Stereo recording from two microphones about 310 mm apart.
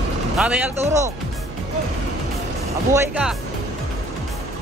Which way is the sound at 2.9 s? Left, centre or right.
Centre.